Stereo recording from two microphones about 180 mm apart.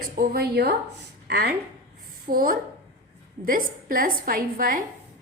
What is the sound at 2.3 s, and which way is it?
A woman's voice, 50° right (ahead or behind).